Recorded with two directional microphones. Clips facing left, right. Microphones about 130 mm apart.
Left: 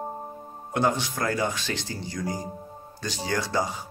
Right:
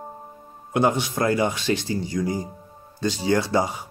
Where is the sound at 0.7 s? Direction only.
20° right (ahead or behind).